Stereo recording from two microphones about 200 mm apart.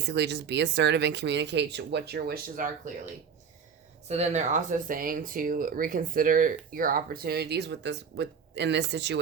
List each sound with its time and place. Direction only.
0.1 s speech: 60° right (ahead or behind)
4.1 s speech: 35° right (ahead or behind); by 9.2 s 60° right (ahead or behind)